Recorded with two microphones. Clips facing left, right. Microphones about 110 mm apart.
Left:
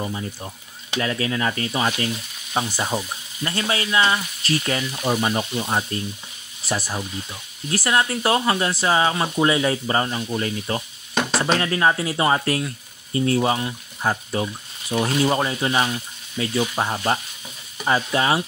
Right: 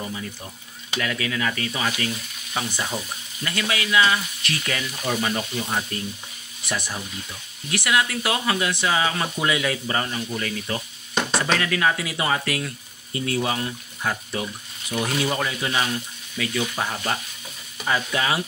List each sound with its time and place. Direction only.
0.0 s speech: 30° left (ahead or behind)
6.6 s speech: 35° left (ahead or behind)